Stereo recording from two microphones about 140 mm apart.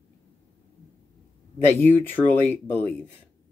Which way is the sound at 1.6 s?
15° left (ahead or behind).